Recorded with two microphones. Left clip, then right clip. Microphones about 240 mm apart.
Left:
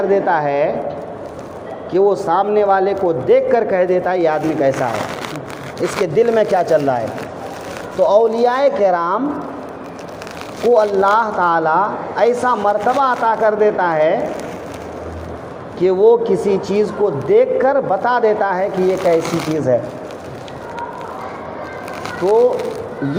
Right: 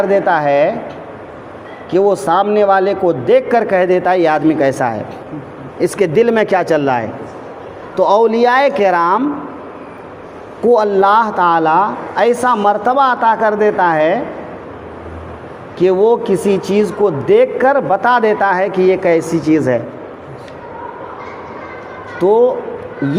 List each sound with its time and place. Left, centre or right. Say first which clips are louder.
0.1 s a man's voice: right 3 dB; right
1.9 s a man's voice: right 2 dB; right
8.0 s a man's voice: right 2 dB; right
10.7 s a man's voice: right 2 dB; right
15.8 s a man's voice: even; right